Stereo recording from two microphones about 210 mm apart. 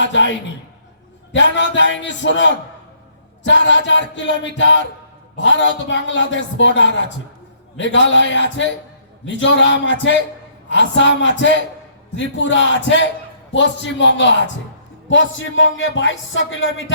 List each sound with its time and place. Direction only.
0.0 s a man's voice: 60° left (ahead or behind)
1.3 s a man's voice: 60° left (ahead or behind)